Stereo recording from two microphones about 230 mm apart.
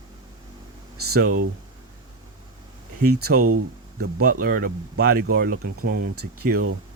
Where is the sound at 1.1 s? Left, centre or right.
Right.